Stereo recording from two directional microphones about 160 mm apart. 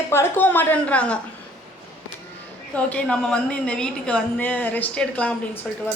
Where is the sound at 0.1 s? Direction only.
15° left (ahead or behind).